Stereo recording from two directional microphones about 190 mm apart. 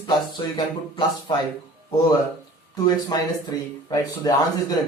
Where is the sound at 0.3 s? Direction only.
25° left (ahead or behind).